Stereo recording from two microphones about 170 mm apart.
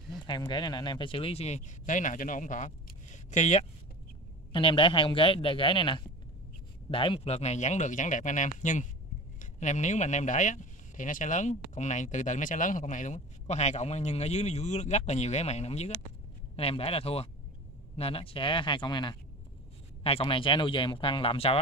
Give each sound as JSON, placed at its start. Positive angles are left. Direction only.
{"t": 0.3, "sound": "speech", "side_deg": 25}
{"t": 4.5, "sound": "a man's voice", "side_deg": 30}